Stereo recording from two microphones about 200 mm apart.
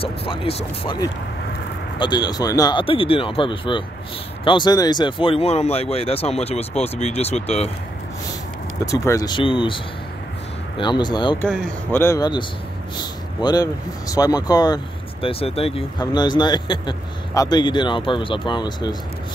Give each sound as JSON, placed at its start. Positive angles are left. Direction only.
{"t": 0.0, "sound": "speech", "side_deg": 25}
{"t": 8.8, "sound": "speech", "side_deg": 15}
{"t": 10.8, "sound": "speech", "side_deg": 20}
{"t": 11.4, "sound": "speech", "side_deg": 10}